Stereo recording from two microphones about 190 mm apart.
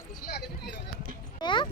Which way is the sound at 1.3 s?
25° left (ahead or behind).